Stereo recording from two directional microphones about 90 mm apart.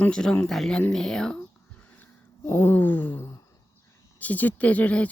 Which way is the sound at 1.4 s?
15° left (ahead or behind).